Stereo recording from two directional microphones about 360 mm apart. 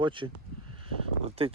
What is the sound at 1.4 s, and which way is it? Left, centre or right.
Speech, centre.